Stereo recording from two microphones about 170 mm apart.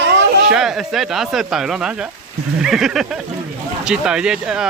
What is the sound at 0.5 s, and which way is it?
Speech, 5° right (ahead or behind).